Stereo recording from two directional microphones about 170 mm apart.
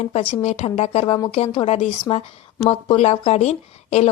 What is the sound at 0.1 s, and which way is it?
A woman's voice, 35° left (ahead or behind).